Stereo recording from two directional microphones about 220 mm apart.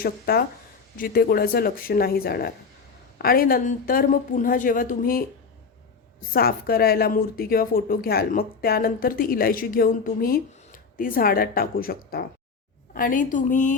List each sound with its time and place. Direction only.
0.0 s speech: 45° left (ahead or behind)
6.3 s speech: 45° left (ahead or behind)